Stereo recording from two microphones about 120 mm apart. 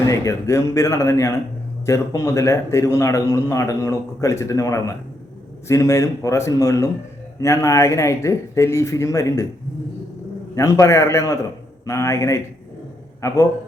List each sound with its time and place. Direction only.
0.0 s a man's voice: 25° left (ahead or behind)
10.5 s a man's voice: 25° left (ahead or behind)